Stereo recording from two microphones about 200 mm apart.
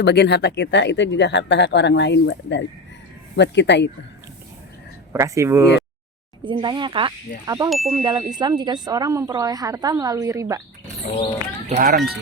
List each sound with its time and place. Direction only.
0.0 s speech: 55° left (ahead or behind)
5.1 s a woman's voice: 15° right (ahead or behind)
7.7 s ding: centre (ahead or behind)
7.9 s a woman's voice: 15° right (ahead or behind)
11.7 s speech: 45° right (ahead or behind)